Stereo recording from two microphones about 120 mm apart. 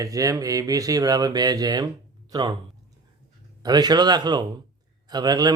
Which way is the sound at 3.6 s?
35° right (ahead or behind).